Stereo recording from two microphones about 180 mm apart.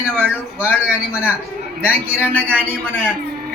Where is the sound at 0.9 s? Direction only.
5° right (ahead or behind).